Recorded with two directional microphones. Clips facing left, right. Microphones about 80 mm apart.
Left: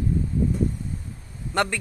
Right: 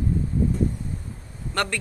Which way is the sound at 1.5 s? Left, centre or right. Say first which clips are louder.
Left 3 dB; centre.